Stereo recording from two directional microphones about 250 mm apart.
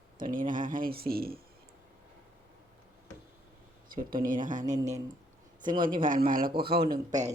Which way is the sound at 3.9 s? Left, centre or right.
Right.